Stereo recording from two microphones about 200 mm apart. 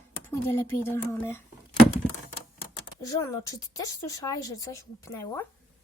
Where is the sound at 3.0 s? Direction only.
15° left (ahead or behind).